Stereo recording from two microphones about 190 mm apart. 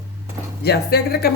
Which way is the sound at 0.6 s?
55° left (ahead or behind).